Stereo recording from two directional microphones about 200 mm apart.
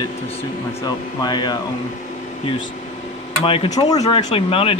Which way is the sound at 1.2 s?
20° left (ahead or behind).